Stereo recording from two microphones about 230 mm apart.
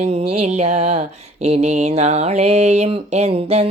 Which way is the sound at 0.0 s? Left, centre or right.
Right.